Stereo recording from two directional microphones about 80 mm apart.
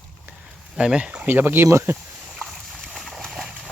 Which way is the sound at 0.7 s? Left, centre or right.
Centre.